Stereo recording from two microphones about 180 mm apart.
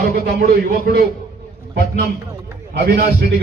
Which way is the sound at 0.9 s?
60° right (ahead or behind).